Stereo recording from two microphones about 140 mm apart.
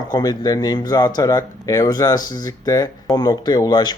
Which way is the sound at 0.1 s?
30° left (ahead or behind).